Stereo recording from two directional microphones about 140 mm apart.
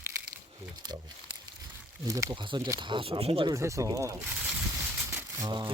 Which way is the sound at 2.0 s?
25° right (ahead or behind).